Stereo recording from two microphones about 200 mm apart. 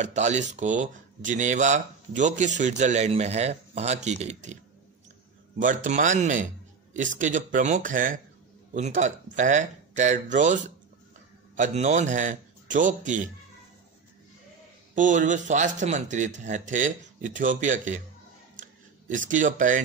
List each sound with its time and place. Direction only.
0.0 s speech: 35° right (ahead or behind)
5.6 s speech: 40° right (ahead or behind)
15.0 s speech: 40° right (ahead or behind)
18.6 s a sound: 40° right (ahead or behind)